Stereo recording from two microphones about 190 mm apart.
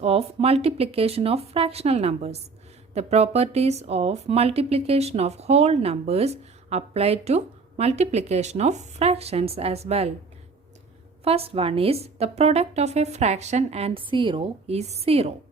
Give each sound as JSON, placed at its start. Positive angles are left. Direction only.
{"t": 0.0, "sound": "a woman's voice", "side_deg": -30}
{"t": 11.2, "sound": "a woman's voice", "side_deg": -30}